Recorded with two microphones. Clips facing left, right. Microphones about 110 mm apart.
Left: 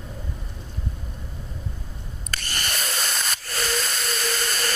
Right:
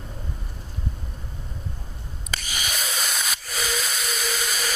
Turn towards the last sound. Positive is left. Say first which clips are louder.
# left 1 dB
turn(degrees=-5)  # may be behind; listen again after turning